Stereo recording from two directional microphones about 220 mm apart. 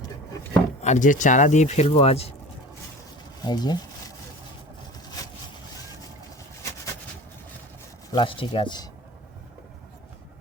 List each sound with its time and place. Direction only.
0.8 s speech: 35° left (ahead or behind)
3.4 s speech: 20° left (ahead or behind)
8.1 s speech: 25° left (ahead or behind)